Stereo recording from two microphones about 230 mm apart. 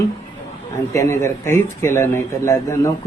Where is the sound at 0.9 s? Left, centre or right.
Centre.